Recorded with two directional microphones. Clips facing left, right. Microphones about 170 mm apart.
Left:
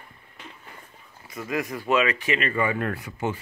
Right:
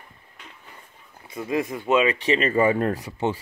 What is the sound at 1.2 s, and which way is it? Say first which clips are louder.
Speech: right 3 dB; 25° right (ahead or behind).